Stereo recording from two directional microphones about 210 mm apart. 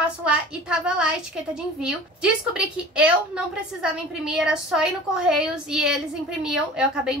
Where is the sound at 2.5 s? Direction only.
5° right (ahead or behind).